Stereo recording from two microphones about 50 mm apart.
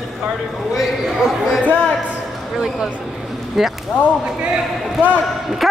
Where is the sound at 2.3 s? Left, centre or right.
Centre.